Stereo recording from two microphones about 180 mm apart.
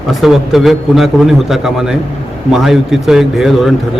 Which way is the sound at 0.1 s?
Centre (ahead or behind).